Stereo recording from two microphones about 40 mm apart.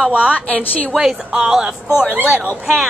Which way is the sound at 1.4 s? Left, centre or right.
Centre.